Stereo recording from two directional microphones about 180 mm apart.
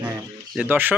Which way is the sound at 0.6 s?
10° right (ahead or behind).